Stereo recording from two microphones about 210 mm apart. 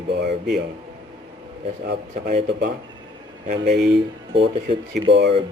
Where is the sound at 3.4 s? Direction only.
50° right (ahead or behind).